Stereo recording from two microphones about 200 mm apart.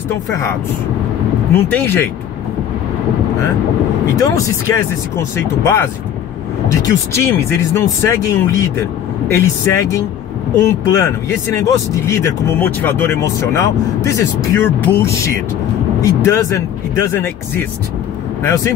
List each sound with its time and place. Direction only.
0.3 s speech: 15° left (ahead or behind)
4.2 s speech: 15° left (ahead or behind)